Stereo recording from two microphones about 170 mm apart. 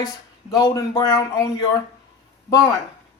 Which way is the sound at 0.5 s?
20° left (ahead or behind).